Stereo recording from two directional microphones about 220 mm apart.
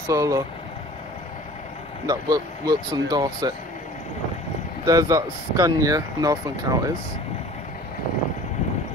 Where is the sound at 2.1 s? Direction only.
15° right (ahead or behind).